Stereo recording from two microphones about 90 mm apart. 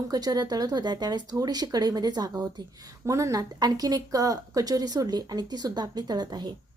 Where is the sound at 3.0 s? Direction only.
35° right (ahead or behind); by 6.5 s 55° right (ahead or behind).